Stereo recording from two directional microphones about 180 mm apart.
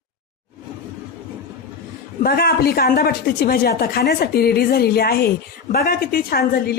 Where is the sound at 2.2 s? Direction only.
55° left (ahead or behind).